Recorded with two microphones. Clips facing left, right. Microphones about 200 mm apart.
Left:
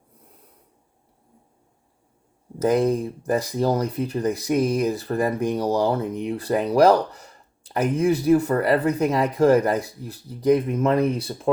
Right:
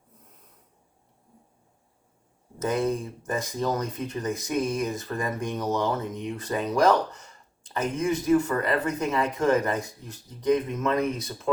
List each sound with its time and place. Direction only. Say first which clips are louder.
2.6 s speech: left 6 dB; 35° left (ahead or behind)